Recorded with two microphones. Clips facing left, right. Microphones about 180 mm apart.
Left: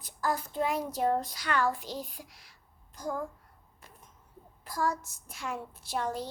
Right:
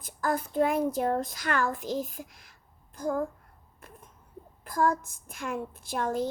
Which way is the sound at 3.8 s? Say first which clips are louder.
Right 6 dB; 55° right (ahead or behind).